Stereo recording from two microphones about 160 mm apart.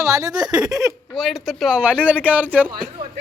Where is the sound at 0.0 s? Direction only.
20° right (ahead or behind).